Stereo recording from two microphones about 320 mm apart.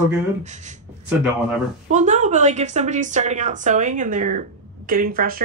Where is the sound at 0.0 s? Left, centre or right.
Right.